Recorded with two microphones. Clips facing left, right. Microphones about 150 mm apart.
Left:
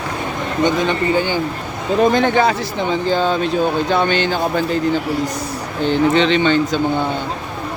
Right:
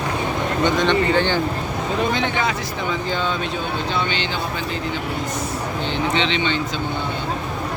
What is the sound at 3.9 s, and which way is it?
Speech, 50° left (ahead or behind).